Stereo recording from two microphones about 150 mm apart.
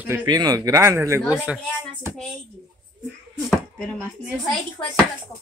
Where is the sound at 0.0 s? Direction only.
15° right (ahead or behind).